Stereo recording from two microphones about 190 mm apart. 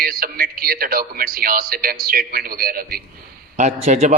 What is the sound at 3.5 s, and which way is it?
Speech, 40° right (ahead or behind).